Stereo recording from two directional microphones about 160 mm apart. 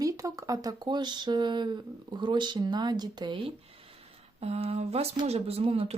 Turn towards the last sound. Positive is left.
turn(degrees=-35)  # may be behind; listen again after turning